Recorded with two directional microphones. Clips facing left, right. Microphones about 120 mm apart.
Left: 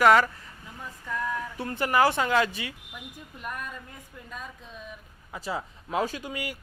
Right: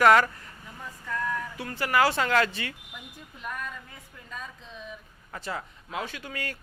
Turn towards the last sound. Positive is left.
turn(degrees=15)  # may be behind; listen again after turning